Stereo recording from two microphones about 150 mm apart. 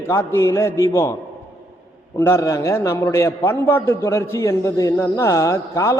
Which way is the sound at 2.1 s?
15° left (ahead or behind).